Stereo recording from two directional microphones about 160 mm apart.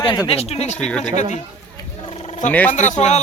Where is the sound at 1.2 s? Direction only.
50° left (ahead or behind).